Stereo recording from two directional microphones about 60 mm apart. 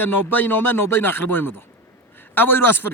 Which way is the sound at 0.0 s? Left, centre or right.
Left.